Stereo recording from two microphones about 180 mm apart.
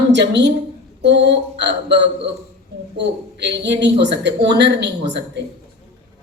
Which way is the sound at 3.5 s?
70° right (ahead or behind).